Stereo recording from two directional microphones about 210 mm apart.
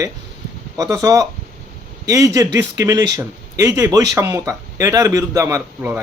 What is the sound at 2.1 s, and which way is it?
Speech, 15° right (ahead or behind).